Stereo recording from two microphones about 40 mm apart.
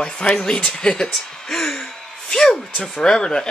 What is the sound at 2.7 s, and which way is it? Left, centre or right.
Speech, left.